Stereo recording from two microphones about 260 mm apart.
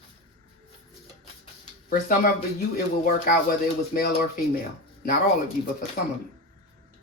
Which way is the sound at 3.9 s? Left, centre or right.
Left.